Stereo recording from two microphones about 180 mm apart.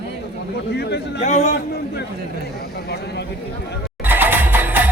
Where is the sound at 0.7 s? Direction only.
70° left (ahead or behind).